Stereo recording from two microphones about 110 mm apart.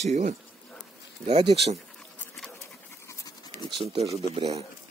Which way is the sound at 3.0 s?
35° left (ahead or behind).